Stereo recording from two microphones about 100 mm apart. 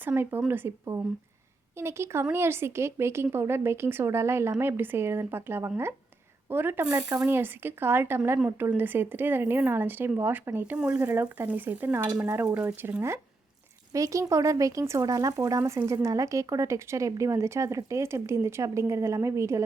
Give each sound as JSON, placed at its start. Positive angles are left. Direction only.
{"t": 0.0, "sound": "speech", "side_deg": -20}